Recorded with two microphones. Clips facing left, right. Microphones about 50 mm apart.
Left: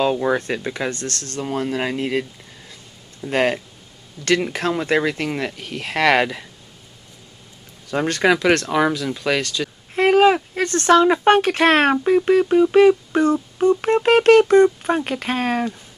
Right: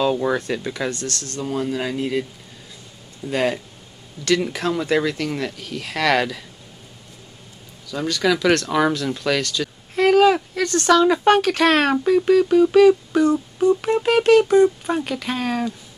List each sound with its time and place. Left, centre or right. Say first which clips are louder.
0.0 s speech: left 1 dB; left
0.4 s music: left 1 dB; left
3.3 s music: left 2 dB; left
4.4 s speech: left 1 dB; left
7.8 s music: left 3 dB; left
8.6 s a woman's voice: even; centre
9.9 s speech: even; left
12.3 s music: right 2 dB; left